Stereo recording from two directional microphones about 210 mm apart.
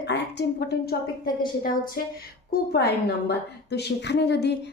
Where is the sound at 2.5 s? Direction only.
50° left (ahead or behind).